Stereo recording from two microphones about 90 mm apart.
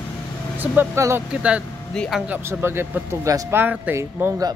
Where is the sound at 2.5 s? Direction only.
25° right (ahead or behind).